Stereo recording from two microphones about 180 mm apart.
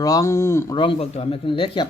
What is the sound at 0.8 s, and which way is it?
Speech, 30° left (ahead or behind).